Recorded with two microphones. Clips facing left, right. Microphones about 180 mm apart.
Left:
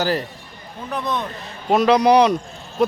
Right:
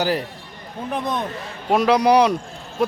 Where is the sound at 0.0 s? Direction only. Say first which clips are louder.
Even; 10° right (ahead or behind).